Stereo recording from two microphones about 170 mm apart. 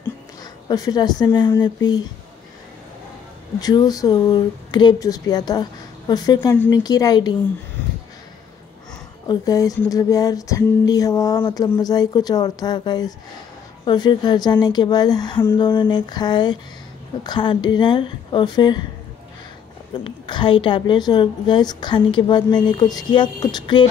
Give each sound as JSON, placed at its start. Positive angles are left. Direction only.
{"t": 0.0, "sound": "a sound", "side_deg": 20}
{"t": 1.6, "sound": "a woman's voice", "side_deg": 25}
{"t": 3.5, "sound": "a woman's voice", "side_deg": 25}
{"t": 9.3, "sound": "a woman's voice", "side_deg": 20}
{"t": 19.9, "sound": "a woman's voice", "side_deg": 30}